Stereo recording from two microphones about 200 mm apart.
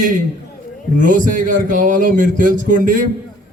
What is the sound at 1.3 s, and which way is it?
Speech, 40° right (ahead or behind).